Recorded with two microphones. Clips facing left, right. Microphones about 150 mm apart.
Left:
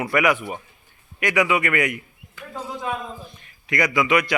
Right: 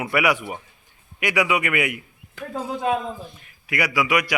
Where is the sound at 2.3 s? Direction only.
65° right (ahead or behind).